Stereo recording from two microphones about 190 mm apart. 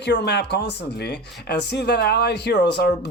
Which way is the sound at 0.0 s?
60° left (ahead or behind).